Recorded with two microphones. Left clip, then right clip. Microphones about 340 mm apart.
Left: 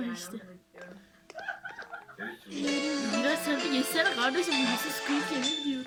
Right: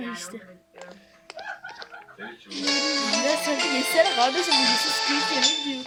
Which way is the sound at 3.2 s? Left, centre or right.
Centre.